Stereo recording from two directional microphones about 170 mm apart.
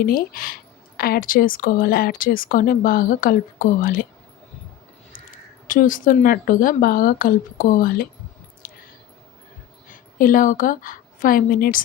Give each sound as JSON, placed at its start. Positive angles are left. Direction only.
{"t": 0.0, "sound": "speech", "side_deg": 60}
{"t": 5.6, "sound": "speech", "side_deg": 50}
{"t": 8.6, "sound": "a sound", "side_deg": 60}
{"t": 9.9, "sound": "a woman's voice", "side_deg": 55}